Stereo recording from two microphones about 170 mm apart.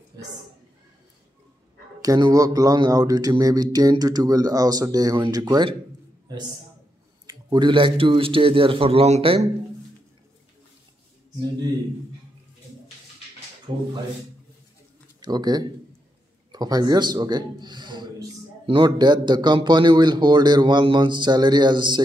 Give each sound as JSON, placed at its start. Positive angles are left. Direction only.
{"t": 2.0, "sound": "a man's voice", "side_deg": -25}
{"t": 13.7, "sound": "a man's voice", "side_deg": -35}
{"t": 15.1, "sound": "a man's voice", "side_deg": -25}